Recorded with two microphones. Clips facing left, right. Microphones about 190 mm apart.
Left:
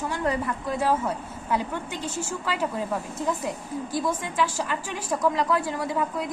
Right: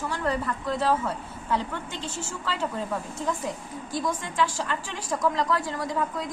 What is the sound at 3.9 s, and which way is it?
A woman's voice, 10° left (ahead or behind).